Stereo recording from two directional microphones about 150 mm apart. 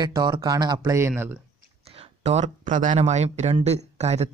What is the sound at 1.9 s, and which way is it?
Speech, 40° right (ahead or behind).